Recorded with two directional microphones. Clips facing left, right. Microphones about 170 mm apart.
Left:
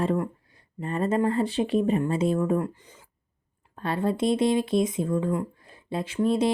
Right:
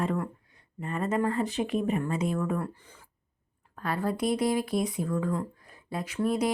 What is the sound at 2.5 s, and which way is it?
Speech, 15° left (ahead or behind).